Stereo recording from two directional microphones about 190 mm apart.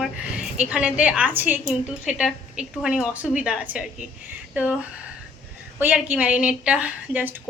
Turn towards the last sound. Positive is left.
turn(degrees=-5)  # may be behind; listen again after turning